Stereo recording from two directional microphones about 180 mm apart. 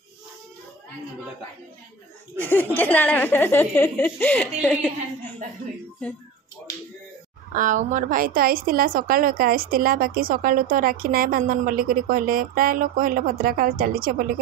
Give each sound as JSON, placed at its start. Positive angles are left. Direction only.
{"t": 2.3, "sound": "speech", "side_deg": 10}
{"t": 7.5, "sound": "a woman's voice", "side_deg": -45}